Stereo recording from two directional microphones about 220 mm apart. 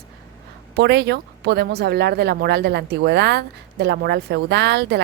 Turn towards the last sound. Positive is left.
turn(degrees=-50)  # may be behind; listen again after turning